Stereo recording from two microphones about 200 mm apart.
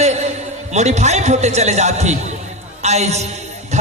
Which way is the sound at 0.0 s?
35° right (ahead or behind).